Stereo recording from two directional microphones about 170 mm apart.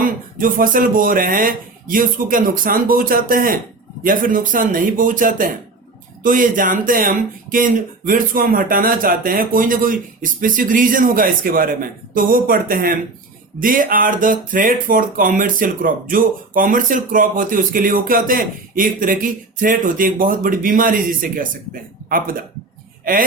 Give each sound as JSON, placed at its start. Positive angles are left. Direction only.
{"t": 0.0, "sound": "speech", "side_deg": -55}